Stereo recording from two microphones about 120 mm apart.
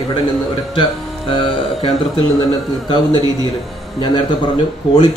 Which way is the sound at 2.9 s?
40° left (ahead or behind).